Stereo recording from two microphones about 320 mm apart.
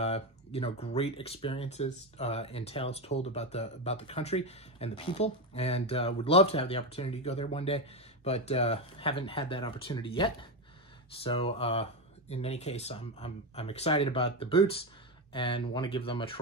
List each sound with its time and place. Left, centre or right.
0.0 s speech: centre